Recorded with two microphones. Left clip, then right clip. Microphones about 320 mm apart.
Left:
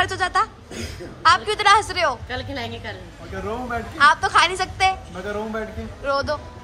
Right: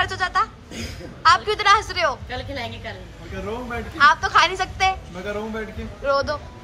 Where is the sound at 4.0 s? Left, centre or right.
Centre.